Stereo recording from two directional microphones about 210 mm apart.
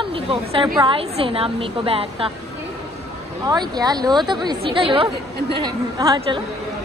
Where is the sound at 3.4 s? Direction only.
20° right (ahead or behind).